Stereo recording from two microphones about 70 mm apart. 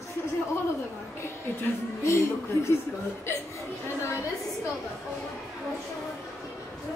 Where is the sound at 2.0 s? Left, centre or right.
Left.